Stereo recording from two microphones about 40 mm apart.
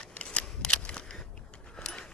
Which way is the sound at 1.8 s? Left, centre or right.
Left.